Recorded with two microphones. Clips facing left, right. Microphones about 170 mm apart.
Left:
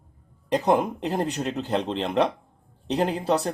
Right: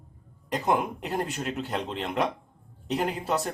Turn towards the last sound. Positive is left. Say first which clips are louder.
# left 4 dB
turn(degrees=30)  # may be behind; listen again after turning